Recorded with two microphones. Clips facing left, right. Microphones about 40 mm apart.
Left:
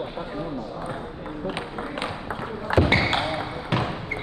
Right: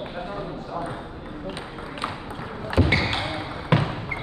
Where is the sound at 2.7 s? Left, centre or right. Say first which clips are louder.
Left 2 dB; left.